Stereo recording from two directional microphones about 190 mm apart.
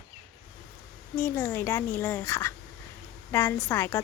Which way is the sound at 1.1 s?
10° left (ahead or behind).